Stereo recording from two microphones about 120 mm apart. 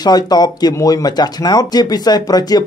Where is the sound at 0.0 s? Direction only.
35° left (ahead or behind).